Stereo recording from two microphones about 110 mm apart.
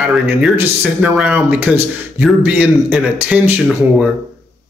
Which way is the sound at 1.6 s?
20° right (ahead or behind).